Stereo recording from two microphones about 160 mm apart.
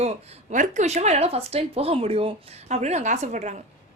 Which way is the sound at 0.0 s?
40° right (ahead or behind).